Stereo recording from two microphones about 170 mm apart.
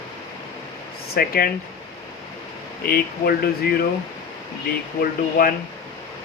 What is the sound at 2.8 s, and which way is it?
Speech, 65° left (ahead or behind).